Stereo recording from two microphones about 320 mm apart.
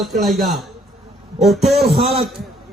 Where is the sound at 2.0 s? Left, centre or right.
Centre.